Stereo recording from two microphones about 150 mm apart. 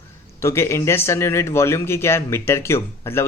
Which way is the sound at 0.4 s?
20° left (ahead or behind).